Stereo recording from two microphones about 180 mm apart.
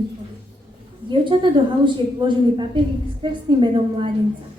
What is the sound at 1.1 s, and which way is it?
A woman's voice, 25° right (ahead or behind).